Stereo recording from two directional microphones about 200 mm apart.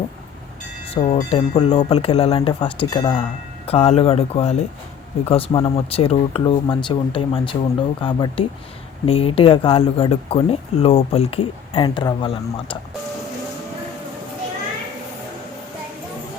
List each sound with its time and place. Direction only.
0.9 s speech: 35° left (ahead or behind)